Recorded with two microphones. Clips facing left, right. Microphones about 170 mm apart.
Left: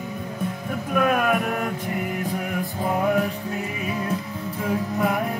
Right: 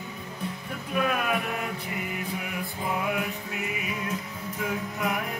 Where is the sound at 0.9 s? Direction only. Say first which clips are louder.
Left 6 dB; 50° left (ahead or behind).